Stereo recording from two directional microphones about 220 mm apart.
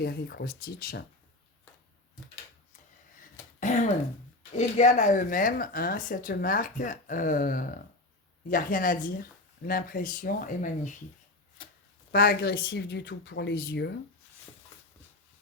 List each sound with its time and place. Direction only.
0.0 s speech: 45° left (ahead or behind)
3.3 s throat clearing: 35° left (ahead or behind)
4.5 s speech: 30° left (ahead or behind)
12.1 s speech: 40° left (ahead or behind)